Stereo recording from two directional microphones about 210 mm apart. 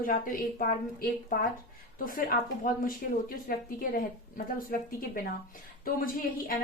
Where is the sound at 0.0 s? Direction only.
40° left (ahead or behind).